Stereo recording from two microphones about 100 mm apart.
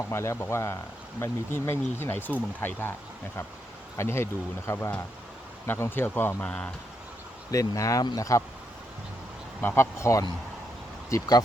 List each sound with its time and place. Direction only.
0.1 s speech: 25° left (ahead or behind)
3.9 s speech: 25° left (ahead or behind)
6.4 s speech: 10° left (ahead or behind)
7.5 s speech: 35° left (ahead or behind)
9.6 s speech: 20° left (ahead or behind); by 11.4 s 40° left (ahead or behind)